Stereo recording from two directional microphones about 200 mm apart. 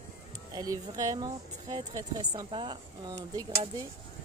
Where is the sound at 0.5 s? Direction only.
20° right (ahead or behind).